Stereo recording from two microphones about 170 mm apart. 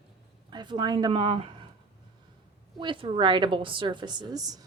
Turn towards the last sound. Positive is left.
turn(degrees=-25)  # may be behind; listen again after turning